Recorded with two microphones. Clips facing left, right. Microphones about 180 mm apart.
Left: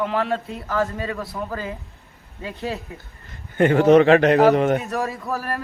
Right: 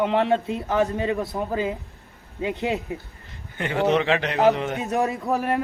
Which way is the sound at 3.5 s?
50° left (ahead or behind).